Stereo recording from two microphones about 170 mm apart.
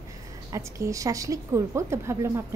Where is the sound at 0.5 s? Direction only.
20° right (ahead or behind).